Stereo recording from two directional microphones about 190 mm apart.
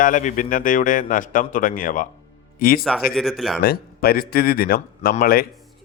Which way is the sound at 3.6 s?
55° left (ahead or behind).